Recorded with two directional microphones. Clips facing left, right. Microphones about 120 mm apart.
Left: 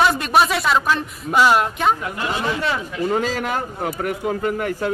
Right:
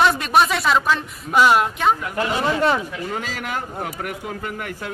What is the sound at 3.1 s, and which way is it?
Speech, 40° left (ahead or behind).